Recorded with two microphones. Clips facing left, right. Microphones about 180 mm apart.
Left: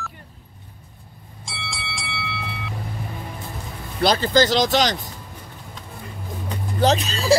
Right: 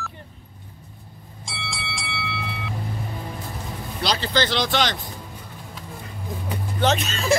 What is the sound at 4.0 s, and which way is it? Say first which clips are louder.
Speech: left 6 dB; 50° left (ahead or behind).